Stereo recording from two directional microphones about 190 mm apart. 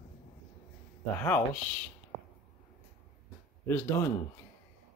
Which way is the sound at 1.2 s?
10° left (ahead or behind).